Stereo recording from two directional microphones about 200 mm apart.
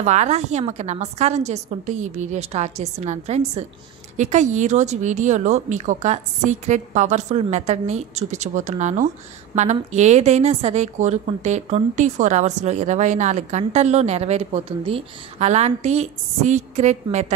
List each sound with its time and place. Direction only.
0.0 s a woman's voice: 35° right (ahead or behind)